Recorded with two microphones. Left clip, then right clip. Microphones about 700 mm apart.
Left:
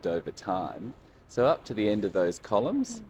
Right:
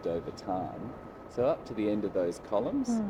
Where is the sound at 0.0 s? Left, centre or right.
Left.